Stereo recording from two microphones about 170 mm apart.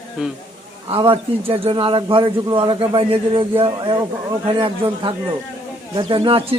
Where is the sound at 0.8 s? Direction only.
35° right (ahead or behind).